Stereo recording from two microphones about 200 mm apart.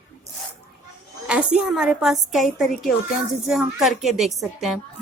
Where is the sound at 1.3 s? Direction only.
5° right (ahead or behind).